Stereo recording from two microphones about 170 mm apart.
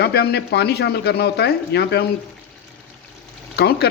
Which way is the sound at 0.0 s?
70° left (ahead or behind).